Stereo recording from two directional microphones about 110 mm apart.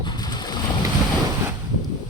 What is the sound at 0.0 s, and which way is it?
Vehicle, 40° left (ahead or behind).